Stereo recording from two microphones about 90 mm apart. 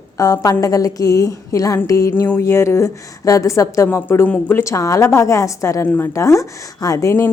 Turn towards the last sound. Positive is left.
turn(degrees=30)  # may be behind; listen again after turning